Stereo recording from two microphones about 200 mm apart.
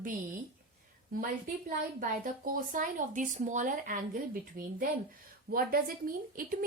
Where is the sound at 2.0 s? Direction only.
45° right (ahead or behind).